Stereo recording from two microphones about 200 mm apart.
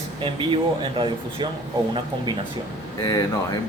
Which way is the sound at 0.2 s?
25° right (ahead or behind).